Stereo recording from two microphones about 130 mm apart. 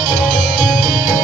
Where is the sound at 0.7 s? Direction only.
90° left.